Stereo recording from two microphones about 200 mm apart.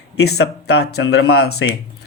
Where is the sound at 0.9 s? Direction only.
90° left.